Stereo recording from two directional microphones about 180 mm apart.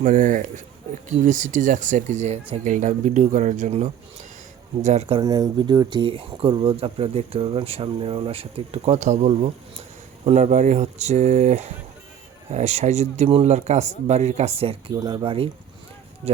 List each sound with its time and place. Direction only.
0.0 s speech: 45° right (ahead or behind)
5.2 s speech: 20° right (ahead or behind)